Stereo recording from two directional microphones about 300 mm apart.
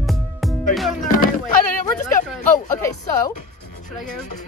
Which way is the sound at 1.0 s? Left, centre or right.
Left.